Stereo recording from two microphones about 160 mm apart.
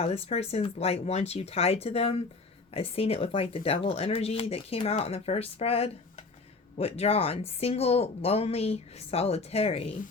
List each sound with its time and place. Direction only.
0.0 s speech: 40° left (ahead or behind)